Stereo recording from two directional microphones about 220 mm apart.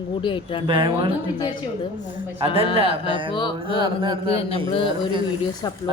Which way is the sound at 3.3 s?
20° left (ahead or behind).